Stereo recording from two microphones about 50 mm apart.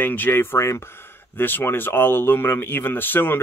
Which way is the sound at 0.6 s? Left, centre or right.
Left.